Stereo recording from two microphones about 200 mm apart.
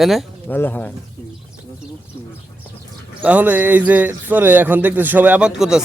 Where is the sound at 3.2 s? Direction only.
5° right (ahead or behind).